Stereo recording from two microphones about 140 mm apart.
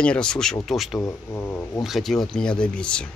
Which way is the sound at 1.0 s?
15° left (ahead or behind).